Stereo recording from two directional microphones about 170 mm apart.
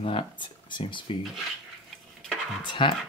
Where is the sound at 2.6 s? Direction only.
25° left (ahead or behind).